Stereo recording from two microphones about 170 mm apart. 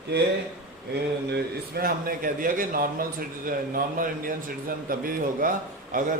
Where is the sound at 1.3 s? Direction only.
60° right (ahead or behind).